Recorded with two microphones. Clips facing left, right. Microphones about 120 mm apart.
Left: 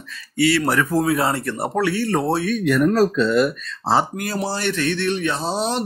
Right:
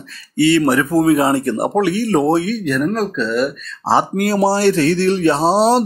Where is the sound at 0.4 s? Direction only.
25° right (ahead or behind).